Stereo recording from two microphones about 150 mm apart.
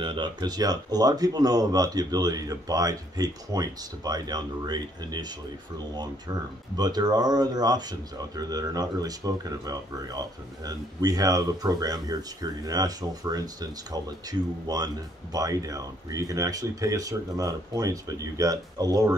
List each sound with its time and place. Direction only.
0.0 s speech: 30° right (ahead or behind)
6.8 s speech: 25° right (ahead or behind)